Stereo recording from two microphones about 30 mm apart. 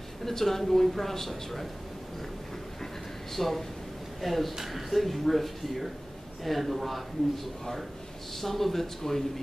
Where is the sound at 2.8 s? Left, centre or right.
Centre.